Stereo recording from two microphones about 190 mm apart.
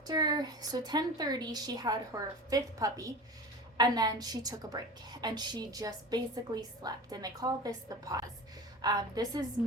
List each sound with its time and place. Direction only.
0.1 s a woman's voice: 20° right (ahead or behind)